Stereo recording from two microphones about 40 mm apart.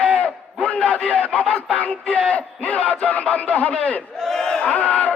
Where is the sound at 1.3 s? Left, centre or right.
Left.